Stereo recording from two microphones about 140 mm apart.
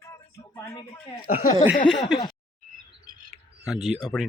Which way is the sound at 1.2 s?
90° left.